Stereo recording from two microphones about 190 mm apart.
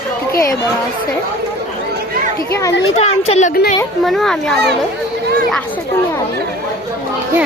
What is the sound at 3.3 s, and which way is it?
Speech, 35° left (ahead or behind).